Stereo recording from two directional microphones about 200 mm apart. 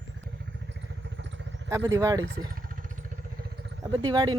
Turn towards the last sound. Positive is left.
turn(degrees=-20)  # may be behind; listen again after turning